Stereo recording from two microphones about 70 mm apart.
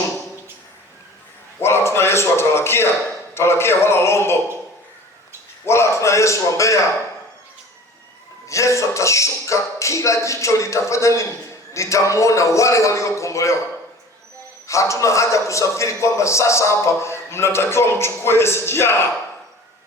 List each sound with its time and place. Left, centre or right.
1.5 s a sound: left
3.3 s a man's voice: left
5.6 s a man's voice: left
8.4 s a man's voice: left
14.7 s a man's voice: left